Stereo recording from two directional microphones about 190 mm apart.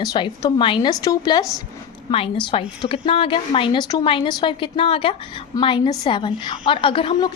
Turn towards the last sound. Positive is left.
turn(degrees=25)  # may be behind; listen again after turning